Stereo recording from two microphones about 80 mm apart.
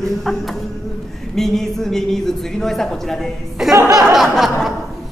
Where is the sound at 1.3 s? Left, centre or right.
Centre.